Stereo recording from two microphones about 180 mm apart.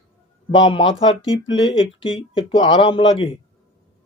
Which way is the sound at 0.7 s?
25° left (ahead or behind).